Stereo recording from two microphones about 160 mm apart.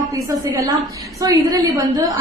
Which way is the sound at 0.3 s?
20° right (ahead or behind).